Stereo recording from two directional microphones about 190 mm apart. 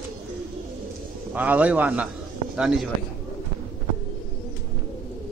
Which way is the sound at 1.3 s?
10° right (ahead or behind).